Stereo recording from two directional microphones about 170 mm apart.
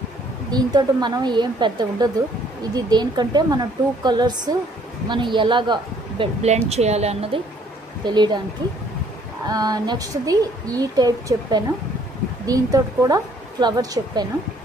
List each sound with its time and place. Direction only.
0.5 s a woman's voice: 25° right (ahead or behind)
6.4 s a woman's voice: 40° right (ahead or behind)
8.0 s a woman's voice: 25° right (ahead or behind)
9.5 s a woman's voice: 20° right (ahead or behind)